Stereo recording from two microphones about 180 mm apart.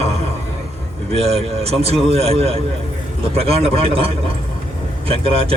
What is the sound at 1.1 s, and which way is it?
A man's voice, 35° right (ahead or behind).